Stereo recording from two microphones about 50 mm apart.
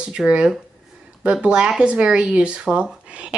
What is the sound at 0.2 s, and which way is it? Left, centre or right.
Speech, centre.